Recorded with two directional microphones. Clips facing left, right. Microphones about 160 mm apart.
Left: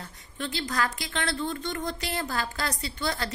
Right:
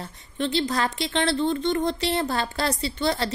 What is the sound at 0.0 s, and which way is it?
A woman's voice, 25° right (ahead or behind).